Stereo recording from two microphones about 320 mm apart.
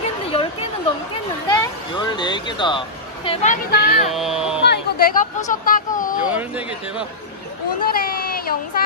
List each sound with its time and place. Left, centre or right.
0.3 s a sound: centre
3.3 s speech: left
4.1 s speech: centre
4.6 s a sound: left
5.5 s speech: left
6.3 s speech: centre
7.8 s speech: left